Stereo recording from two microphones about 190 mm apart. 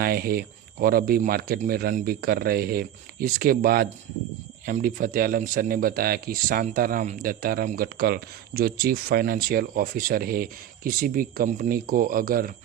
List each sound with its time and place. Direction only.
0.0 s speech: 50° right (ahead or behind)